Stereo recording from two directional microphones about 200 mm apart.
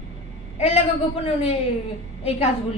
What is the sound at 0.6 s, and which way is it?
Speech, 30° left (ahead or behind).